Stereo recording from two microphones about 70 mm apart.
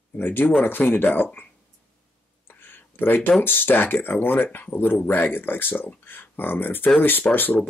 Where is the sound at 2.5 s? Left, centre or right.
Left.